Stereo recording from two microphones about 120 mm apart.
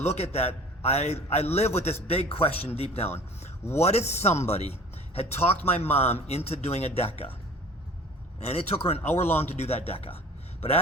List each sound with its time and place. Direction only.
0.0 s a man's voice: 60° left (ahead or behind)
8.4 s a man's voice: 55° left (ahead or behind)